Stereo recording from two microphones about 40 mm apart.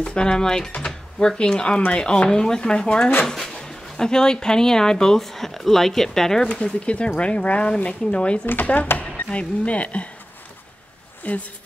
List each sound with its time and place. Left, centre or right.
0.0 s speech: left
3.3 s speech: centre
6.5 s speech: left
11.2 s a woman's voice: left